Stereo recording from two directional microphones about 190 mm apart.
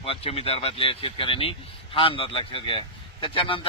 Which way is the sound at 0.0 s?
30° left (ahead or behind).